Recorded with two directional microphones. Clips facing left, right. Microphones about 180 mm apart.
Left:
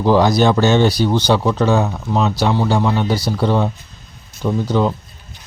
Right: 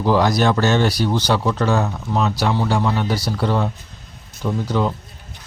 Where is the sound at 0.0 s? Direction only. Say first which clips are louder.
Left 3 dB; 25° left (ahead or behind).